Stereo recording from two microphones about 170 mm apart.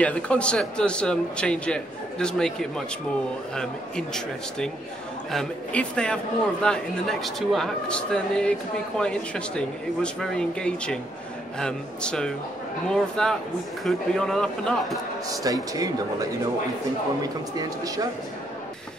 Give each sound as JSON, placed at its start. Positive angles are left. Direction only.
{"t": 0.0, "sound": "a man's voice", "side_deg": 10}
{"t": 15.2, "sound": "speech", "side_deg": -20}
{"t": 17.6, "sound": "speech", "side_deg": -20}